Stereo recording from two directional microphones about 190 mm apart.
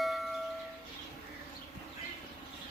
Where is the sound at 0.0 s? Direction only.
Centre (ahead or behind).